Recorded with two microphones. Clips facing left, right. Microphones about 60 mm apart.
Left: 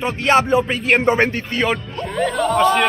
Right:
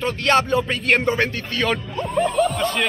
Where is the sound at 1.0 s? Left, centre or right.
Left.